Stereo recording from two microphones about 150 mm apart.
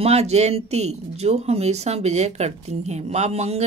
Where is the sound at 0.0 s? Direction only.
45° right (ahead or behind).